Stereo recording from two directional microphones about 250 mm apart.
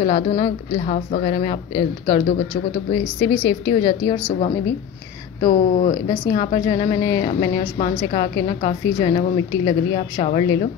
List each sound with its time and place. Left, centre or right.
0.0 s a woman's voice: left